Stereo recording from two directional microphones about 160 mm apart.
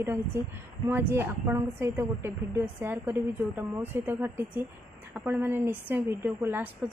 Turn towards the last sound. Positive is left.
turn(degrees=-10)  # may be behind; listen again after turning